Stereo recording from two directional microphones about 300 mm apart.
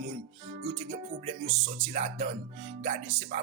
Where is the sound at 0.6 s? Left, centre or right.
Right.